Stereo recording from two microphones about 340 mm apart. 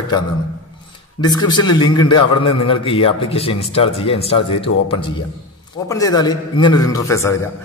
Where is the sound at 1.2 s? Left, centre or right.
Centre.